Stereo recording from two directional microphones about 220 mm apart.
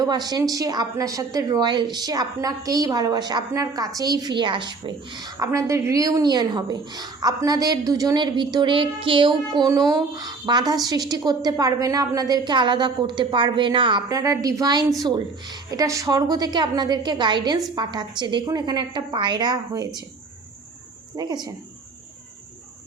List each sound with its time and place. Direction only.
0.0 s a woman's voice: 20° right (ahead or behind)
21.2 s a woman's voice: 20° right (ahead or behind)